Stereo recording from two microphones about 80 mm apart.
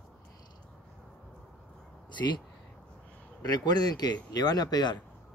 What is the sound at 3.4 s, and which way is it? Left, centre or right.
Speech, left.